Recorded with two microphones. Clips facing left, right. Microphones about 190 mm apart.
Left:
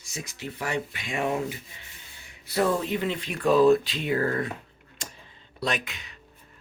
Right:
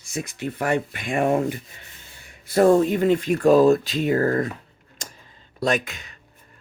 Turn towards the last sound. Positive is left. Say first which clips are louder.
# right 7 dB
turn(degrees=-45)  # may be behind; listen again after turning